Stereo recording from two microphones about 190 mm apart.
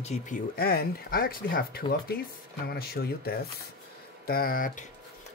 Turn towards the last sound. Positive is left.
turn(degrees=45)  # may be behind; listen again after turning